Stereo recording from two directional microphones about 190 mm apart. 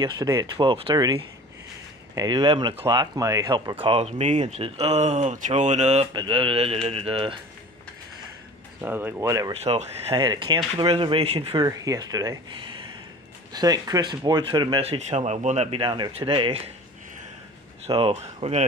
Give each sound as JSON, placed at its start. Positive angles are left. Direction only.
{"t": 0.0, "sound": "speech", "side_deg": -20}
{"t": 3.8, "sound": "speech", "side_deg": -30}
{"t": 6.1, "sound": "speech", "side_deg": -25}
{"t": 8.8, "sound": "speech", "side_deg": -10}
{"t": 9.5, "sound": "speech", "side_deg": -35}
{"t": 11.6, "sound": "speech", "side_deg": -20}
{"t": 17.8, "sound": "speech", "side_deg": -30}